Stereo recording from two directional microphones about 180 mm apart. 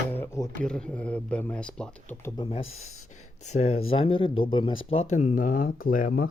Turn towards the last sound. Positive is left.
turn(degrees=50)  # may be behind; listen again after turning